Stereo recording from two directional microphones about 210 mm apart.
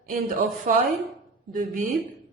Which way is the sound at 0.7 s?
35° right (ahead or behind).